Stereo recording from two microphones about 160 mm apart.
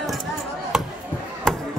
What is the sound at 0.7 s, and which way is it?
Chop, centre (ahead or behind).